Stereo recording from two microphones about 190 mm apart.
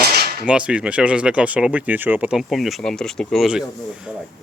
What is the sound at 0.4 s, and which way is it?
Speech, 5° right (ahead or behind).